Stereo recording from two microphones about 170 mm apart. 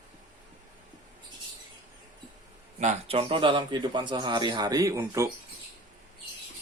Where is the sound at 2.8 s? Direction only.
40° right (ahead or behind); by 5.2 s 20° right (ahead or behind).